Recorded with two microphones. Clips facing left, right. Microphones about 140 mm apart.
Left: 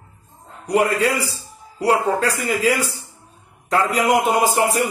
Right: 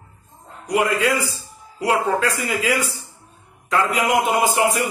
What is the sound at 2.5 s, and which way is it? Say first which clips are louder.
A man's voice: left 2 dB; 35° left (ahead or behind).